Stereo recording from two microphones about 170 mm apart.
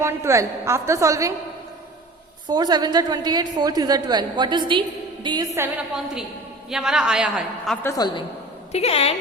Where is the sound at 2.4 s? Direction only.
25° right (ahead or behind).